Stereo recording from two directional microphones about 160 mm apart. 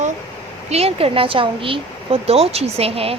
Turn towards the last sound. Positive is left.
turn(degrees=-40)  # may be behind; listen again after turning